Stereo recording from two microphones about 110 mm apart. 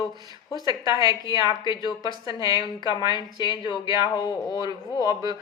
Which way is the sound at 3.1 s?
45° left (ahead or behind).